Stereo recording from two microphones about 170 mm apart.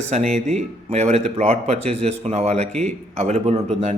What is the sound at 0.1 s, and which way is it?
A man's voice, 40° right (ahead or behind).